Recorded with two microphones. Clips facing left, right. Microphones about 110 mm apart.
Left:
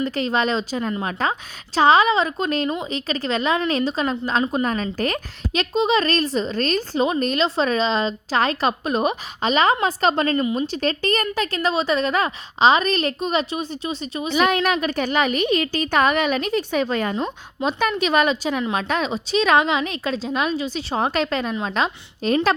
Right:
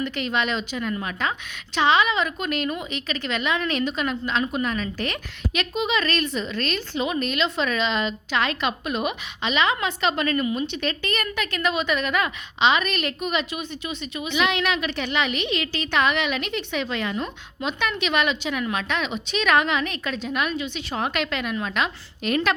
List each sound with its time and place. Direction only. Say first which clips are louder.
0.0 s a woman's voice: left 4 dB; 35° left (ahead or behind)